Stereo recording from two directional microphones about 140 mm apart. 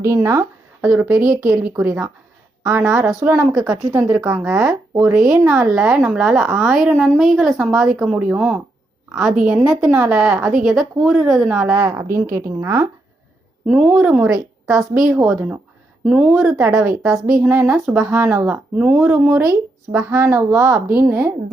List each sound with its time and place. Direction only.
0.0 s a woman's voice: 20° right (ahead or behind)
3.9 s a woman's voice: 20° right (ahead or behind)
4.6 s a woman's voice: 5° right (ahead or behind)
13.7 s a woman's voice: 5° right (ahead or behind)
17.7 s a woman's voice: centre (ahead or behind)
20.1 s a woman's voice: 20° right (ahead or behind)